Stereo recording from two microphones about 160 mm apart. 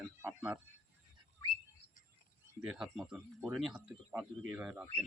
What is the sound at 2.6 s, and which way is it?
Speech, 5° right (ahead or behind).